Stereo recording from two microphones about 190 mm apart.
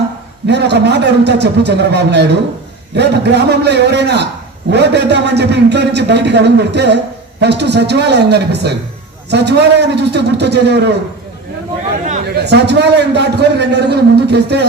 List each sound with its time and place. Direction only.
0.4 s a man's voice: 65° right (ahead or behind)
12.2 s a man's voice: 60° right (ahead or behind)